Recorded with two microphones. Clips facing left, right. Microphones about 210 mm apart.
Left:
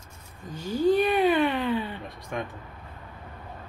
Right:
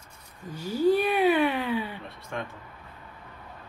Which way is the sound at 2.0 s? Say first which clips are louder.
Left 2 dB; 15° left (ahead or behind).